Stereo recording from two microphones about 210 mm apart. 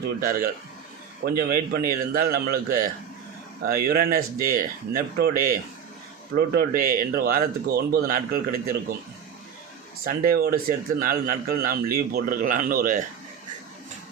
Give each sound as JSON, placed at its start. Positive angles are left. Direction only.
{"t": 0.2, "sound": "a man's voice", "side_deg": -45}
{"t": 10.0, "sound": "a man's voice", "side_deg": -45}